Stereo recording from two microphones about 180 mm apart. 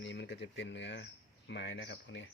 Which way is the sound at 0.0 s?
75° left (ahead or behind).